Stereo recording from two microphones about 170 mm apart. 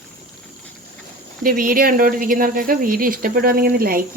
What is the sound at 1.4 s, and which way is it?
Speech, 55° right (ahead or behind).